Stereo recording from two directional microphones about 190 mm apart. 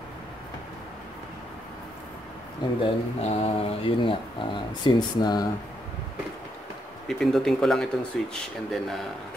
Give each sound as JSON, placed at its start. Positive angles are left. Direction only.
{"t": 2.8, "sound": "speech", "side_deg": 35}
{"t": 7.1, "sound": "speech", "side_deg": 0}